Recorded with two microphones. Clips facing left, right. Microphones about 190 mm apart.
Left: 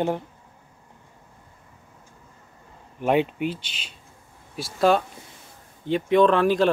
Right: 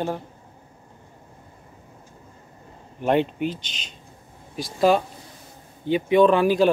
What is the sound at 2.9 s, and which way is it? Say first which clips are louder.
Speech: even; 5° left (ahead or behind).